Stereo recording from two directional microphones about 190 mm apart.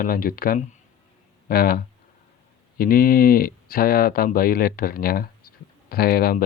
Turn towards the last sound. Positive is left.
turn(degrees=50)  # may be behind; listen again after turning